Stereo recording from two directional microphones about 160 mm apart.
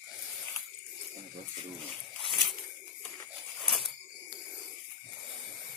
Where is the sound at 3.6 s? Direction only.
Centre (ahead or behind).